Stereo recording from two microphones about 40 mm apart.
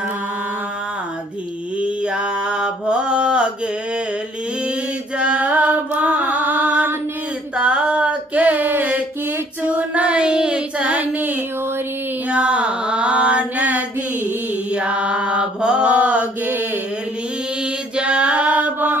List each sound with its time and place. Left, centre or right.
1.8 s mantra: right
5.2 s music: right
7.5 s a sound: right
9.7 s child singing: right
10.9 s a sound: right
12.3 s mantra: right
14.8 s mantra: right
17.9 s female singing: right